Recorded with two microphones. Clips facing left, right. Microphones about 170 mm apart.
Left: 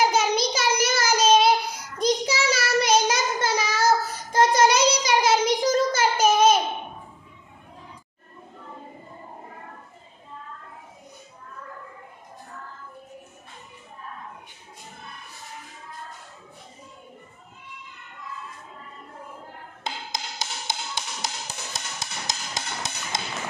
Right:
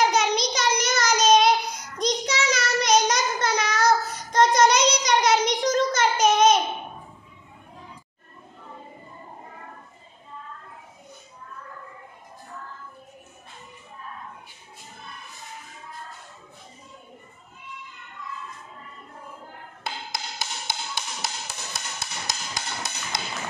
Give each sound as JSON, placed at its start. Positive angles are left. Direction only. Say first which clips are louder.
{"t": 0.0, "sound": "child singing", "louder": "even", "side_deg": 5}
{"t": 5.9, "sound": "a sound", "louder": "even", "side_deg": 5}
{"t": 19.8, "sound": "music", "louder": "left 1 dB", "side_deg": 20}